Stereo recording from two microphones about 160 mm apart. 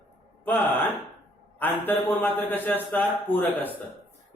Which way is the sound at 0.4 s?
10° left (ahead or behind).